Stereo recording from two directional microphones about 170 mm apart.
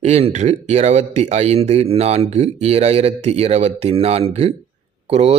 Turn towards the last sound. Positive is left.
turn(degrees=-35)  # may be behind; listen again after turning